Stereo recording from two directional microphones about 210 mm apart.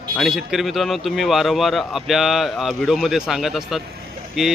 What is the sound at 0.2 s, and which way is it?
Speech, centre (ahead or behind).